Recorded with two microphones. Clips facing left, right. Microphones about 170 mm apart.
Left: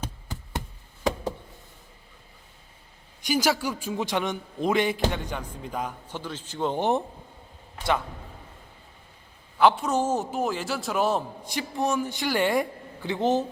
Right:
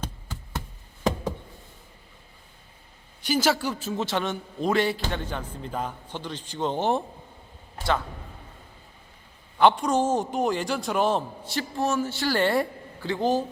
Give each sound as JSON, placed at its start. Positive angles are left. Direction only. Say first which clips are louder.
{"t": 0.0, "sound": "knock", "louder": "even", "side_deg": 15}
{"t": 3.2, "sound": "a man's voice", "louder": "right 1 dB", "side_deg": 10}
{"t": 9.6, "sound": "a man's voice", "louder": "right 1 dB", "side_deg": 5}